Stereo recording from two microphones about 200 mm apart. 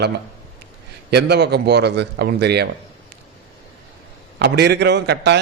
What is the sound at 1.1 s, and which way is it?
A man's voice, 55° right (ahead or behind).